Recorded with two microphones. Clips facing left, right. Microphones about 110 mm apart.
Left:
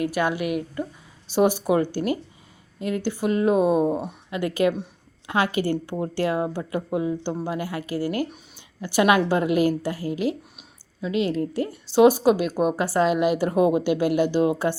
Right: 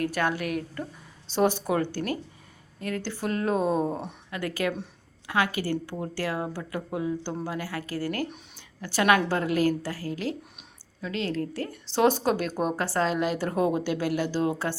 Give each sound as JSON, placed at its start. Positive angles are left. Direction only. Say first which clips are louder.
{"t": 0.0, "sound": "a woman's voice", "louder": "left 3 dB", "side_deg": 10}